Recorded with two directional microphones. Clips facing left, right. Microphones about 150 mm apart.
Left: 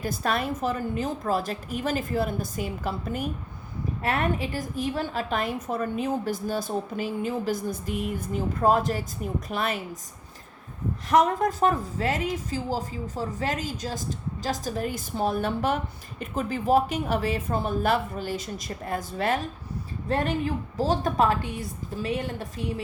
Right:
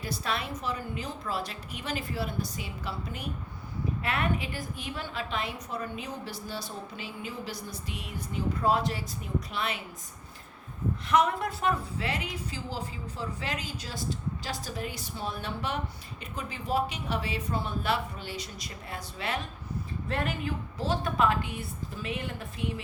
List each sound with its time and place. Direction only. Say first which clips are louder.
0.0 s a woman's voice: left 6 dB; 50° left (ahead or behind)
11.1 s a woman's voice: left 5 dB; 40° left (ahead or behind)
20.1 s a woman's voice: left 7 dB; 35° left (ahead or behind)